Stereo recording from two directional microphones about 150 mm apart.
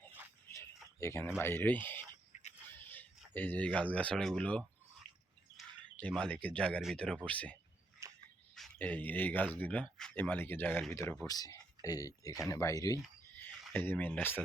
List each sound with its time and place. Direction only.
0.5 s a sound: 20° left (ahead or behind)
1.4 s speech: 15° left (ahead or behind)
2.3 s a sound: 50° left (ahead or behind)
2.6 s a sound: 15° left (ahead or behind)
3.3 s speech: 10° left (ahead or behind)
5.6 s chirp: centre (ahead or behind)
6.0 s speech: 5° left (ahead or behind)
8.0 s frog: 20° right (ahead or behind)
8.8 s speech: 10° left (ahead or behind)